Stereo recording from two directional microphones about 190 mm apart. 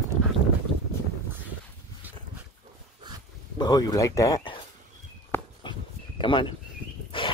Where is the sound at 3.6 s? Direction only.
20° left (ahead or behind).